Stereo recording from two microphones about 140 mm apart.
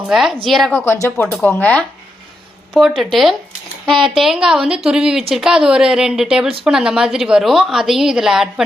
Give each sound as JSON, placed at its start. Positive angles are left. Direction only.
{"t": 0.1, "sound": "a woman's voice", "side_deg": 0}
{"t": 0.7, "sound": "speech", "side_deg": 15}
{"t": 2.7, "sound": "a woman's voice", "side_deg": 0}